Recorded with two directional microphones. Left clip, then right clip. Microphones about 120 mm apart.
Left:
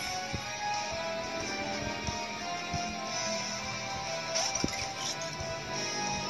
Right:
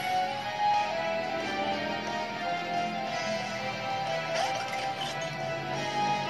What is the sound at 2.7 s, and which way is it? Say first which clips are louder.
Music: right 4 dB; 45° right (ahead or behind).